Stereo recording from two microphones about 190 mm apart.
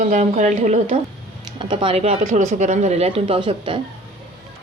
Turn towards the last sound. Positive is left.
turn(degrees=-25)  # may be behind; listen again after turning